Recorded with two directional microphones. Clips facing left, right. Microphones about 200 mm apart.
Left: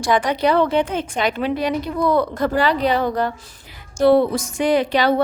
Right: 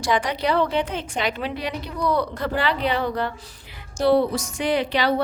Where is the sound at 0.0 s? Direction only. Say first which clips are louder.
Left 5 dB; 50° left (ahead or behind).